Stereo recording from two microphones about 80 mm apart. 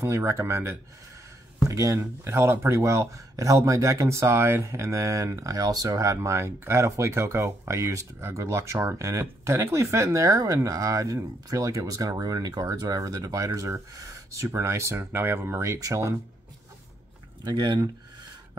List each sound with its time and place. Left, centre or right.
0.0 s speech: right
13.5 s speech: right
17.5 s speech: right